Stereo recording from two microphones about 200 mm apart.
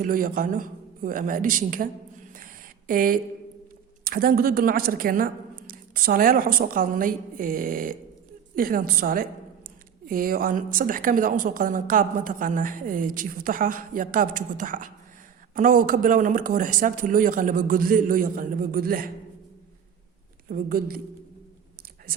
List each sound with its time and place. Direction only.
0.0 s a woman's voice: 45° right (ahead or behind)
2.3 s a sound: 45° right (ahead or behind)
4.0 s a woman's voice: 45° right (ahead or behind)
20.5 s a woman's voice: 45° right (ahead or behind)